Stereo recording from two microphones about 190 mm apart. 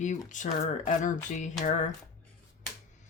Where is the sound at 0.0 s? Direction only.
40° left (ahead or behind).